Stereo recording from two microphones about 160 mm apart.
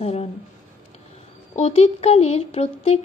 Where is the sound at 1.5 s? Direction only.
40° left (ahead or behind).